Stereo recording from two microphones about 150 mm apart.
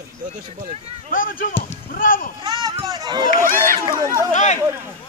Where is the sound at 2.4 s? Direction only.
25° right (ahead or behind).